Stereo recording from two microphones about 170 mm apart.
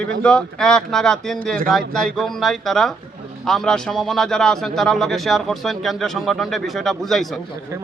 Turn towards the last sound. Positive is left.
turn(degrees=-15)  # may be behind; listen again after turning